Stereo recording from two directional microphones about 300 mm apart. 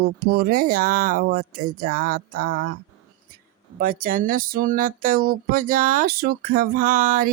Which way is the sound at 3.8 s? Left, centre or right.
Right.